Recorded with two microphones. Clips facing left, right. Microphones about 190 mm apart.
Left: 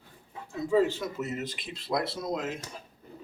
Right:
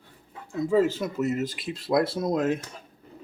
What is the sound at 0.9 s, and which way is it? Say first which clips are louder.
Speech: right 6 dB; 40° right (ahead or behind).